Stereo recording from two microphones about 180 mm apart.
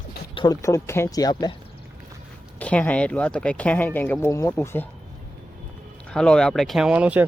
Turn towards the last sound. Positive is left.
turn(degrees=-5)  # may be behind; listen again after turning